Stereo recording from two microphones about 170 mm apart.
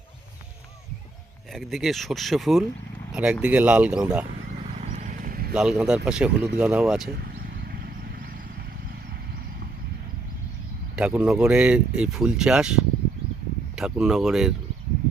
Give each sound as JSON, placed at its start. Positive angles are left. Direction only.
{"t": 1.5, "sound": "speech", "side_deg": 0}
{"t": 4.8, "sound": "vehicle", "side_deg": -45}
{"t": 5.5, "sound": "speech", "side_deg": -5}
{"t": 7.7, "sound": "vehicle", "side_deg": -65}
{"t": 10.9, "sound": "speech", "side_deg": -5}